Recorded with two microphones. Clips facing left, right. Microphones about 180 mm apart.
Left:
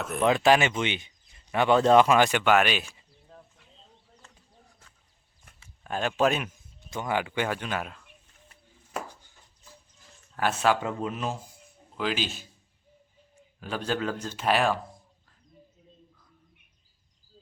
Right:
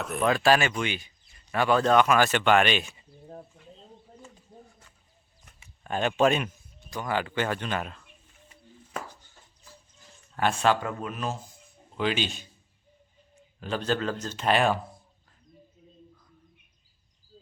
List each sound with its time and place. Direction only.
0.0 s speech: centre (ahead or behind)
0.3 s speech: 20° left (ahead or behind)
2.4 s speech: 5° left (ahead or behind)
5.8 s speech: centre (ahead or behind)
6.9 s speech: 20° left (ahead or behind)
8.9 s a sound: 15° left (ahead or behind)
10.3 s speech: 5° left (ahead or behind)
10.8 s speech: 20° left (ahead or behind)
11.9 s speech: 5° left (ahead or behind)
13.6 s speech: 10° left (ahead or behind)